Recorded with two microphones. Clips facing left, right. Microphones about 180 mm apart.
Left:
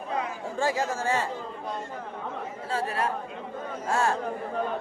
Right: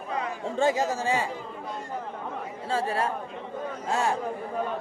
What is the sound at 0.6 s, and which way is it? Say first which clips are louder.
Speech: right 3 dB; 20° right (ahead or behind).